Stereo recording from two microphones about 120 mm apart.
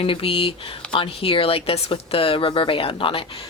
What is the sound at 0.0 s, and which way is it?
Speech, 50° left (ahead or behind).